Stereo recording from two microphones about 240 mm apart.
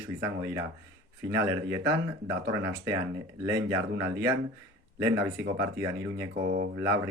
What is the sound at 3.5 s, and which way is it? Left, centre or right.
Speech, right.